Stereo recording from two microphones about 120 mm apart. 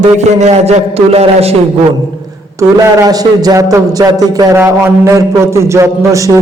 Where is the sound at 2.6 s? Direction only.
30° right (ahead or behind).